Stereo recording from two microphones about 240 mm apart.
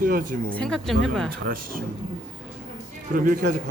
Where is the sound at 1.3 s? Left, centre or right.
Right.